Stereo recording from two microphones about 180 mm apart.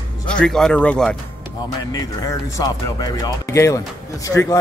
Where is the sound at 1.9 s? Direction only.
20° left (ahead or behind).